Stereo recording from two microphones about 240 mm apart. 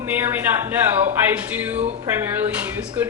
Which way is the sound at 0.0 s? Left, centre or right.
Centre.